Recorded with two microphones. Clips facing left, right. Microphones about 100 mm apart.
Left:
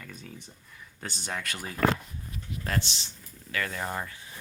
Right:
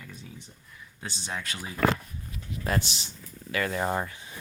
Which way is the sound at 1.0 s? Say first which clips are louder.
Even; 55° left (ahead or behind).